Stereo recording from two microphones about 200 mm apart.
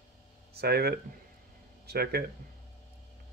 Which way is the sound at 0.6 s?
50° right (ahead or behind).